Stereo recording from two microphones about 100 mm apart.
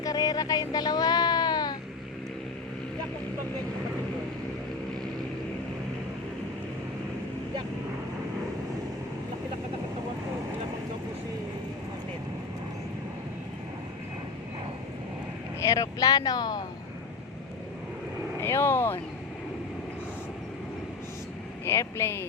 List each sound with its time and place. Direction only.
0.0 s a sound: 40° left (ahead or behind)
15.6 s speech: 35° left (ahead or behind)
18.3 s speech: 25° left (ahead or behind)
21.6 s speech: 25° left (ahead or behind)